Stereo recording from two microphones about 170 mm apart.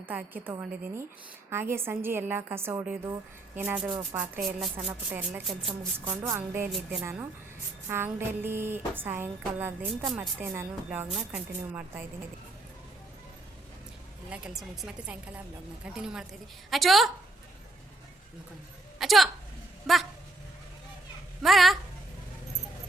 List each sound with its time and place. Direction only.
0.0 s speech: 10° right (ahead or behind)
6.7 s a woman's voice: centre (ahead or behind)
7.0 s speech: 15° right (ahead or behind)
14.3 s a woman's voice: 5° right (ahead or behind)
18.9 s a sound: centre (ahead or behind)
19.9 s a woman's voice: centre (ahead or behind)
21.4 s a woman's voice: centre (ahead or behind)